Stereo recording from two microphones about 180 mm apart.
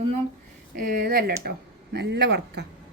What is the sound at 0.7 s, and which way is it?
Speech, 55° right (ahead or behind).